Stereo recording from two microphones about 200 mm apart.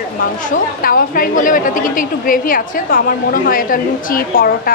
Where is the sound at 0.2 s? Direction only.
45° left (ahead or behind).